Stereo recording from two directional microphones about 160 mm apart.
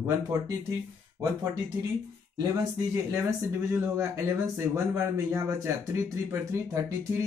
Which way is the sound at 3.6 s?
15° right (ahead or behind).